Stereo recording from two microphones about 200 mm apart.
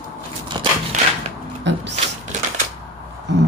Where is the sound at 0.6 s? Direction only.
25° right (ahead or behind).